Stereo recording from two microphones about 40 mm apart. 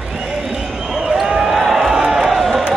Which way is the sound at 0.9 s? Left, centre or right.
Centre.